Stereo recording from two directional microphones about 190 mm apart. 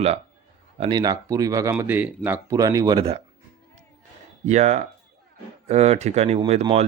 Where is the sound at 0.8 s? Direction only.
20° right (ahead or behind).